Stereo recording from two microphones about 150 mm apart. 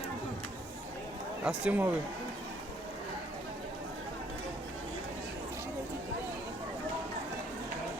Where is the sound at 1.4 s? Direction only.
5° right (ahead or behind).